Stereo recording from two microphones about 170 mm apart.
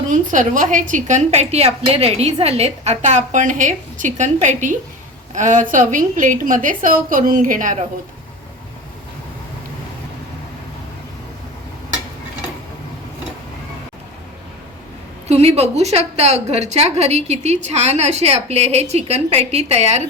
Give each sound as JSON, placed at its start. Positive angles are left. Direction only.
{"t": 0.1, "sound": "a woman's voice", "side_deg": -50}
{"t": 15.3, "sound": "a woman's voice", "side_deg": -40}